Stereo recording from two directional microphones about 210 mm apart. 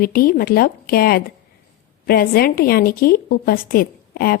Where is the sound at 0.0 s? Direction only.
45° left (ahead or behind).